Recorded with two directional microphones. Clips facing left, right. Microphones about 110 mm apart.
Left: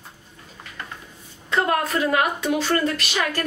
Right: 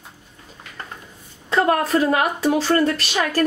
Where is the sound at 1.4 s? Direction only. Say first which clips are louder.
Right 3 dB; 35° right (ahead or behind).